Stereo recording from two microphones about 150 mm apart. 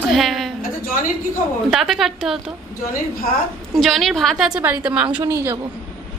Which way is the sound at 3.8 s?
Centre (ahead or behind).